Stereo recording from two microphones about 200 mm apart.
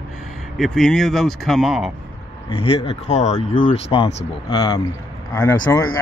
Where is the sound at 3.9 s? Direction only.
25° left (ahead or behind).